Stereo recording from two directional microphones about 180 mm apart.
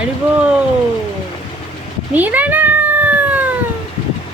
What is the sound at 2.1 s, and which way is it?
Cat, 10° right (ahead or behind).